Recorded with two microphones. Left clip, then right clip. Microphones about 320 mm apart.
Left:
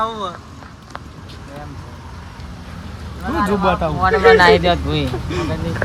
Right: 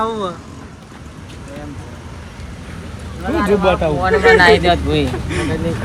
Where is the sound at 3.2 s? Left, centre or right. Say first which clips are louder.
Right 3 dB; centre.